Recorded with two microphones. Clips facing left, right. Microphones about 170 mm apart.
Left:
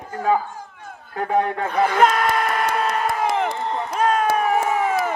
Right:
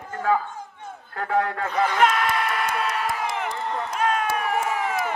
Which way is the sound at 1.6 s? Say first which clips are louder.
Left 3 dB; 55° left (ahead or behind).